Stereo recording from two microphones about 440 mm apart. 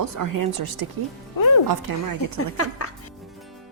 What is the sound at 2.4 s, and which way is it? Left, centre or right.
Speech, left.